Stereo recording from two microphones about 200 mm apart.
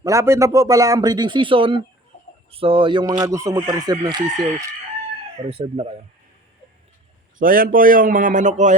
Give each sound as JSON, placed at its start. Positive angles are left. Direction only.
{"t": 0.0, "sound": "speech", "side_deg": -15}
{"t": 5.5, "sound": "speech", "side_deg": -30}
{"t": 7.3, "sound": "a man's voice", "side_deg": -45}